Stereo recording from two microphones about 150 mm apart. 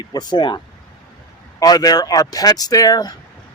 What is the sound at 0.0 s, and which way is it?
Speech, 25° left (ahead or behind).